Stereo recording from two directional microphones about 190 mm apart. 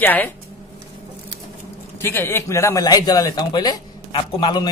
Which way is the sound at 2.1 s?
15° left (ahead or behind).